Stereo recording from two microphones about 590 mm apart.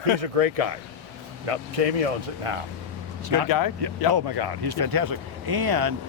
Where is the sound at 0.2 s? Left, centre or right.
Right.